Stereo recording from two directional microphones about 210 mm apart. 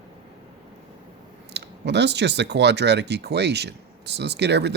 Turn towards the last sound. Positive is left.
turn(degrees=-55)  # may be behind; listen again after turning